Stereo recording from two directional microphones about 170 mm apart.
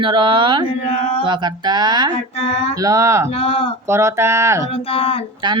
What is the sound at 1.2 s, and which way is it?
Speech, 25° right (ahead or behind).